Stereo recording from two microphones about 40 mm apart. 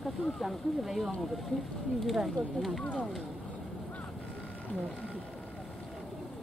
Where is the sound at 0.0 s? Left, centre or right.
Centre.